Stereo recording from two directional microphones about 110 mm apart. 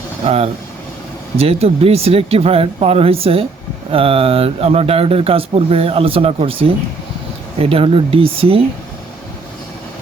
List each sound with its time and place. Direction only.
0.3 s speech: 70° right (ahead or behind)